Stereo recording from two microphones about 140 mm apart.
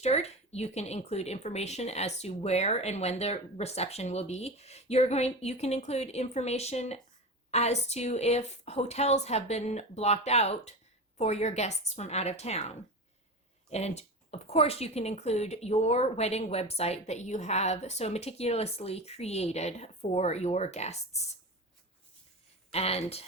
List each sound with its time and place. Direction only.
0.0 s speech: 50° left (ahead or behind)
22.7 s speech: 45° left (ahead or behind)